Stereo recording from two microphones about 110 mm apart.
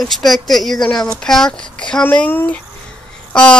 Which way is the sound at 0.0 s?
Centre (ahead or behind).